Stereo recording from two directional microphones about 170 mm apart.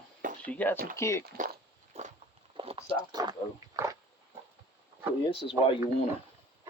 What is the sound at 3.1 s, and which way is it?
Speech, 20° right (ahead or behind).